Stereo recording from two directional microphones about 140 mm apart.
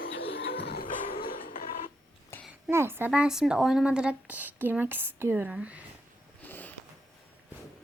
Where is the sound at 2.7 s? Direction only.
20° right (ahead or behind).